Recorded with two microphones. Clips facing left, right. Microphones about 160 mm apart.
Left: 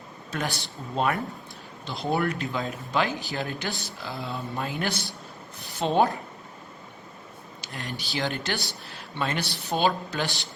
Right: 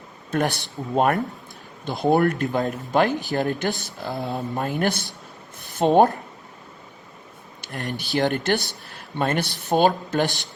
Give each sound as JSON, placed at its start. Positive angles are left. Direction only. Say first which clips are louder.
{"t": 0.3, "sound": "speech", "louder": "right 8 dB", "side_deg": -55}
{"t": 7.6, "sound": "a man's voice", "louder": "right 6 dB", "side_deg": -55}